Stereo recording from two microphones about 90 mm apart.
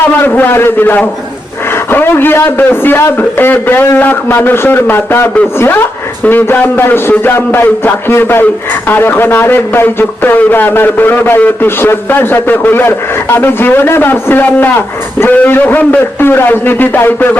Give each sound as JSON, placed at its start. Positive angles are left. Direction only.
{"t": 0.2, "sound": "a man's voice", "side_deg": 20}